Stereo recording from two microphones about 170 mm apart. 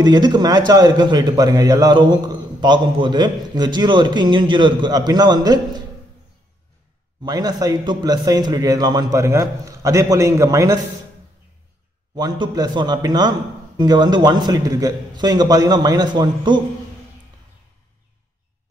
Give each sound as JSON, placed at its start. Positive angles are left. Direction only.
{"t": 0.0, "sound": "a man's voice", "side_deg": -25}
{"t": 7.2, "sound": "a man's voice", "side_deg": -25}
{"t": 12.2, "sound": "a man's voice", "side_deg": -25}